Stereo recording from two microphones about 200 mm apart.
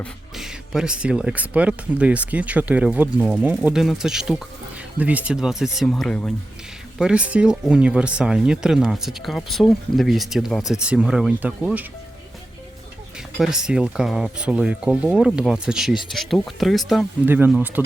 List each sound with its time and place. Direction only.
0.0 s speech: centre (ahead or behind)
13.1 s speech: centre (ahead or behind)